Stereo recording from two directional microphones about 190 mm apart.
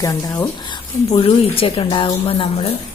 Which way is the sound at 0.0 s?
15° left (ahead or behind).